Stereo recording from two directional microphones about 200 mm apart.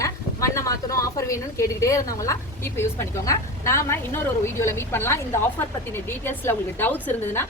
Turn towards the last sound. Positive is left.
turn(degrees=10)  # may be behind; listen again after turning